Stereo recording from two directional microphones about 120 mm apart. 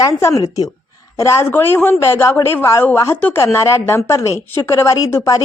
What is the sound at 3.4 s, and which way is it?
Speech, 25° left (ahead or behind).